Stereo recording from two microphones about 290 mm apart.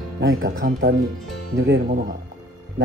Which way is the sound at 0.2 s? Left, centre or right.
Right.